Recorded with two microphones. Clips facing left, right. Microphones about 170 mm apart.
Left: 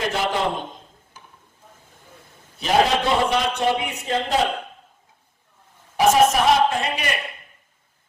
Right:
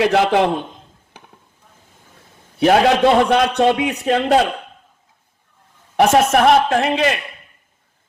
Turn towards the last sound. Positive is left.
turn(degrees=-80)